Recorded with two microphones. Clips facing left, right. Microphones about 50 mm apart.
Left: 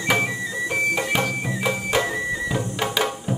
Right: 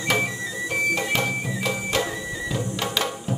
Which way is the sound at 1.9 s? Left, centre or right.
Centre.